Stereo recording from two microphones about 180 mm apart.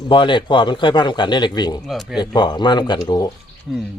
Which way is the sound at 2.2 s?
25° left (ahead or behind).